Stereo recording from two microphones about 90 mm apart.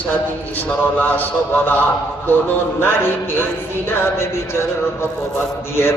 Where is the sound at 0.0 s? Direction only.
20° left (ahead or behind).